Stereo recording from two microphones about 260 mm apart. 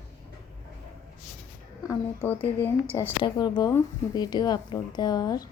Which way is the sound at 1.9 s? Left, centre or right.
Centre.